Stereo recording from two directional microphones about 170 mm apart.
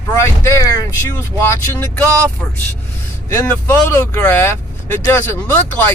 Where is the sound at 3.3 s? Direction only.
10° left (ahead or behind).